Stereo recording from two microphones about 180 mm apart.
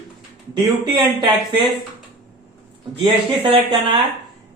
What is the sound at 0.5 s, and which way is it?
Speech, 25° right (ahead or behind).